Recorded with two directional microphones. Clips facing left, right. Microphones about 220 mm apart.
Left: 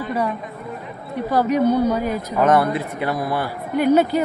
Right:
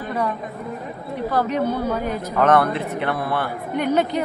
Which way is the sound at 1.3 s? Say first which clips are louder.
Left 5 dB; 10° left (ahead or behind).